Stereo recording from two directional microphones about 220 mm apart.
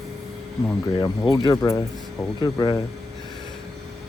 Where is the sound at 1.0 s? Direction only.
20° left (ahead or behind).